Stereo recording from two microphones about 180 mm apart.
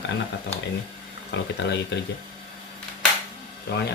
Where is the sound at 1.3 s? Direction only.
75° left (ahead or behind).